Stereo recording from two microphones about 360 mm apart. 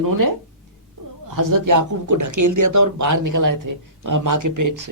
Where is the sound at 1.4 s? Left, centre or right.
Right.